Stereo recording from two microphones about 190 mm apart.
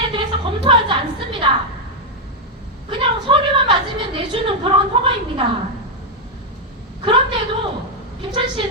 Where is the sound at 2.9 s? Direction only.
25° right (ahead or behind).